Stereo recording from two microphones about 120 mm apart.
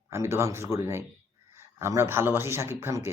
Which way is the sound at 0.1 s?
20° right (ahead or behind).